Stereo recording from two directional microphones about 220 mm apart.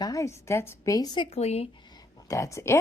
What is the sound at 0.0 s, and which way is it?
A woman's voice, 15° left (ahead or behind).